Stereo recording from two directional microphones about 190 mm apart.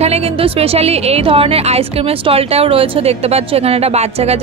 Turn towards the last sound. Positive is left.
turn(degrees=-35)  # may be behind; listen again after turning